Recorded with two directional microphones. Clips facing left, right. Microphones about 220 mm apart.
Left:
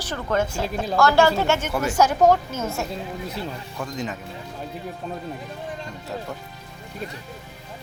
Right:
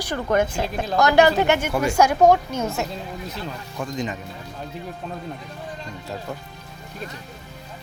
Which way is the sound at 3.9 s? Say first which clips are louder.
Right 2 dB; 5° left (ahead or behind).